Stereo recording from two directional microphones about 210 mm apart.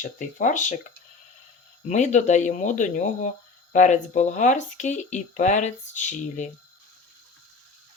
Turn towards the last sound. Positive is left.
turn(degrees=35)  # may be behind; listen again after turning